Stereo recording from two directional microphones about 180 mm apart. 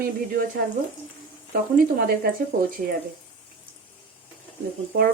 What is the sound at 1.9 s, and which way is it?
Speech, 60° right (ahead or behind).